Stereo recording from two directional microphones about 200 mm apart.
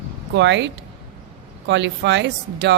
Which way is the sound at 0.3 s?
60° right (ahead or behind).